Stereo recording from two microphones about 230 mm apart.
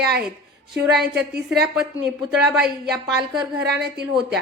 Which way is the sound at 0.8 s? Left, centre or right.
Centre.